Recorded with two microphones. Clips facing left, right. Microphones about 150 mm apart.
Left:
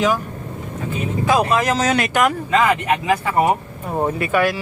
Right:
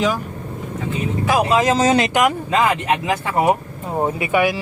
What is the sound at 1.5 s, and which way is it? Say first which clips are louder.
Speech: right 3 dB; 20° right (ahead or behind).